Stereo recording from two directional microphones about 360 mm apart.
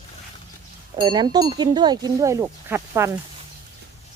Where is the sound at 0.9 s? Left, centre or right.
Centre.